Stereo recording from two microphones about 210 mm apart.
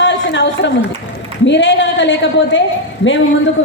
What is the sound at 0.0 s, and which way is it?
A woman's voice, 60° left (ahead or behind).